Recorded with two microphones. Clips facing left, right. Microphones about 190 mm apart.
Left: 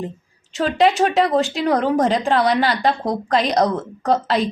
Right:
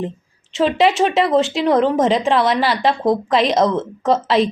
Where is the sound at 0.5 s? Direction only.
Centre (ahead or behind).